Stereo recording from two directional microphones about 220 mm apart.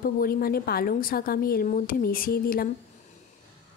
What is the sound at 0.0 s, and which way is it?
A woman's voice, 40° left (ahead or behind).